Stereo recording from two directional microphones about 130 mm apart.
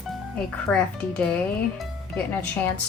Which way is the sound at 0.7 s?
10° left (ahead or behind).